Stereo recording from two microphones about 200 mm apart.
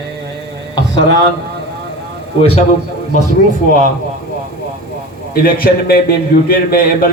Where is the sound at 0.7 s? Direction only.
20° left (ahead or behind).